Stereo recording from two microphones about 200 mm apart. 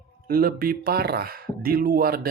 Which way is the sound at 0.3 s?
50° right (ahead or behind).